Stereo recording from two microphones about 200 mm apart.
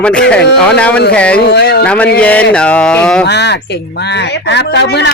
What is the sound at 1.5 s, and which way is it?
Speech, 55° left (ahead or behind).